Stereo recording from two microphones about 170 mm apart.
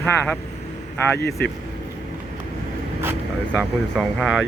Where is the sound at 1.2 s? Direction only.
70° left (ahead or behind).